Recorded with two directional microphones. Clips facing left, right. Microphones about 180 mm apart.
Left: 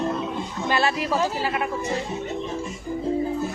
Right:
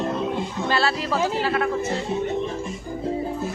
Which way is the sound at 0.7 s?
15° left (ahead or behind).